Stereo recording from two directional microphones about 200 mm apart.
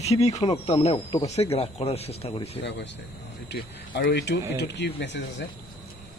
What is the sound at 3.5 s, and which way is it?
Speech, 55° left (ahead or behind).